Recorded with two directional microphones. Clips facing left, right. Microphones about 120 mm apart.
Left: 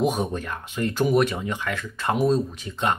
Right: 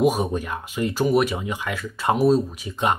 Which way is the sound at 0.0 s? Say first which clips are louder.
Right 3 dB; 5° right (ahead or behind).